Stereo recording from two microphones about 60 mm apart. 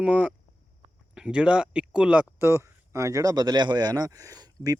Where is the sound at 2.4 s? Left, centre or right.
Right.